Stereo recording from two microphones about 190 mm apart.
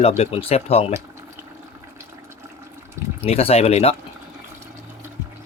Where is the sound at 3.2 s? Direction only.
30° left (ahead or behind).